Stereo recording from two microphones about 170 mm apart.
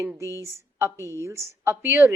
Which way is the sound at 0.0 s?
10° right (ahead or behind).